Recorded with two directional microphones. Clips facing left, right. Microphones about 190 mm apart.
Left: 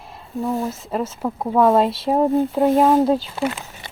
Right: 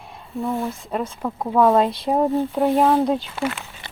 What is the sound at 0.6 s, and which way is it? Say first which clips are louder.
Speech: left 2 dB; 5° left (ahead or behind).